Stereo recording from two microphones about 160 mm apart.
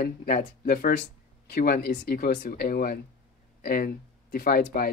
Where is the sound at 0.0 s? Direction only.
60° left (ahead or behind).